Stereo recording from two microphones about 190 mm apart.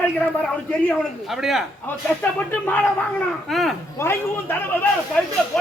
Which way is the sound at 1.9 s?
10° left (ahead or behind).